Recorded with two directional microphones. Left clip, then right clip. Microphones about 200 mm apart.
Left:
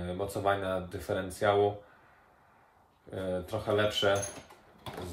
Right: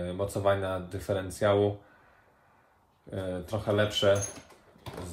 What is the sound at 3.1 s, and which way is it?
Speech, 30° right (ahead or behind).